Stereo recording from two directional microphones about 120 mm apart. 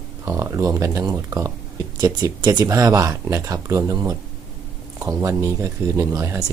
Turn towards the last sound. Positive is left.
turn(degrees=-25)  # may be behind; listen again after turning